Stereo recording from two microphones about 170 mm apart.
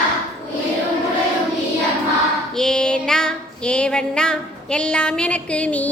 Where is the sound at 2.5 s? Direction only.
5° left (ahead or behind).